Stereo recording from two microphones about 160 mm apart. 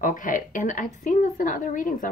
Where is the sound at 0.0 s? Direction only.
55° left (ahead or behind).